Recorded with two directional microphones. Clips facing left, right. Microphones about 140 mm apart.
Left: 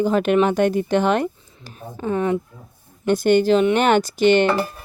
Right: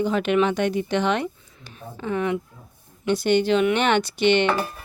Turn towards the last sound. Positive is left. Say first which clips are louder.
# left 4 dB
turn(degrees=40)  # may be behind; listen again after turning